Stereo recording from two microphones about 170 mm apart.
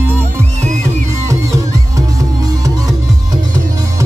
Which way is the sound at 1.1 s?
15° right (ahead or behind).